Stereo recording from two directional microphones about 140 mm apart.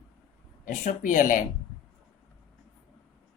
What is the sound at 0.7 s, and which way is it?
Speech, 65° left (ahead or behind).